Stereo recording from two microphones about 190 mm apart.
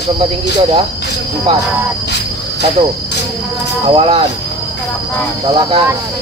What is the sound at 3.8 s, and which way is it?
Cricket, 30° right (ahead or behind).